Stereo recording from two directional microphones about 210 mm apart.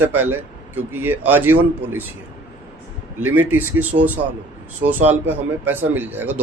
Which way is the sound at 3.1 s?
10° right (ahead or behind).